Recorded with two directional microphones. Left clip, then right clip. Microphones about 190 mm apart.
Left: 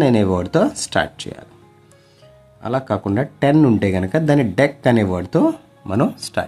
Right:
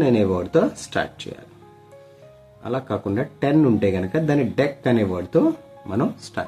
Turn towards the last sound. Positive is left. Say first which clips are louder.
# left 5 dB
turn(degrees=60)  # may be behind; listen again after turning